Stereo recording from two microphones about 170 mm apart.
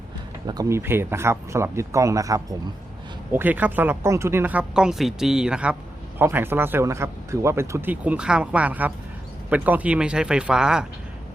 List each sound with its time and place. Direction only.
0.4 s speech: 20° right (ahead or behind); by 10.8 s 5° right (ahead or behind)